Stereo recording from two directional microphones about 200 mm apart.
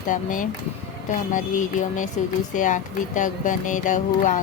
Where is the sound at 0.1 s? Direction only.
40° left (ahead or behind).